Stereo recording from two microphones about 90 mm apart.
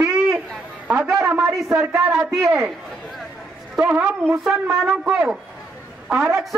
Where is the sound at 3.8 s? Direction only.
15° right (ahead or behind).